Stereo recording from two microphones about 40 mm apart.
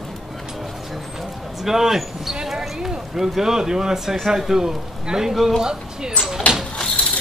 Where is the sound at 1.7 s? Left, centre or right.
Centre.